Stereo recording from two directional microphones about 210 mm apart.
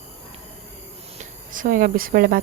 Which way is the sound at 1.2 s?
40° right (ahead or behind).